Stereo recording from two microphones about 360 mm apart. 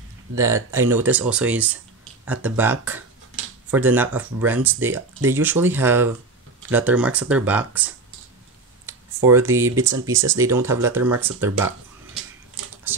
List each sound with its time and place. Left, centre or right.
0.7 s speech: centre
8.8 s computer keyboard: centre
9.8 s speech: centre
12.9 s a sound: centre